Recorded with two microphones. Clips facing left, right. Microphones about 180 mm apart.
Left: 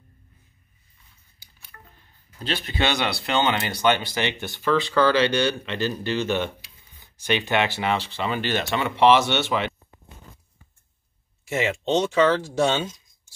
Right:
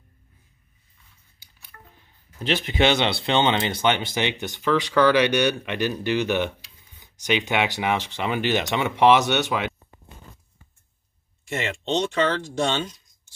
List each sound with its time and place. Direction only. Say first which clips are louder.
1.7 s a sound: right 1 dB; 5° right (ahead or behind)
2.4 s speech: right 4 dB; 20° right (ahead or behind)
11.4 s speech: left 4 dB; 5° left (ahead or behind)